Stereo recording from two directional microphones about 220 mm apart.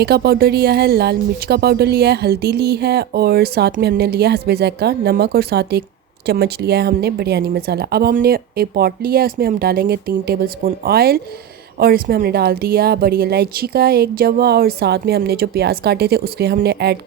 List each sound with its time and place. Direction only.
0.0 s speech: 45° right (ahead or behind)